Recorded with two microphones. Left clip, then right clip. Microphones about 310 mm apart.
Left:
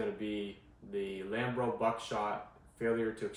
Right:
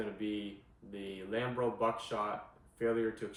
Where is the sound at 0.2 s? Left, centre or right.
Centre.